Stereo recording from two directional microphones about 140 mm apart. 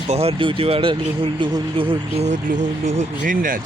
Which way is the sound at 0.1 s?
45° right (ahead or behind).